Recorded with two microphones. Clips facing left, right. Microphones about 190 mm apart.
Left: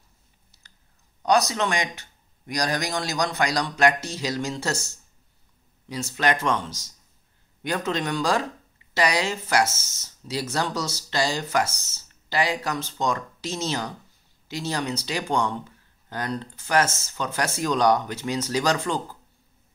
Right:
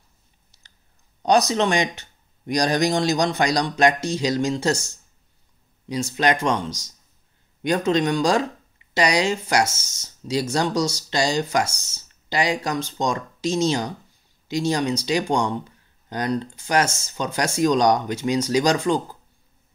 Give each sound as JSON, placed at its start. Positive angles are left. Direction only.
{"t": 1.5, "sound": "speech", "side_deg": -20}